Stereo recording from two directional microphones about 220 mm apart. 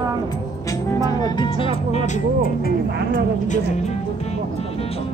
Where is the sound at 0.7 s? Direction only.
15° left (ahead or behind); by 3.9 s 35° left (ahead or behind).